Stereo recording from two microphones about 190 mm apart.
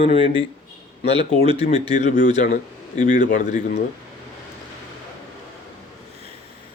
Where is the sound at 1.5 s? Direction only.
35° left (ahead or behind).